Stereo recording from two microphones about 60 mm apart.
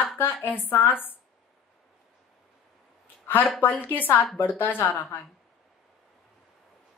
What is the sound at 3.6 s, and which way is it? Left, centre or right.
A woman's voice, left.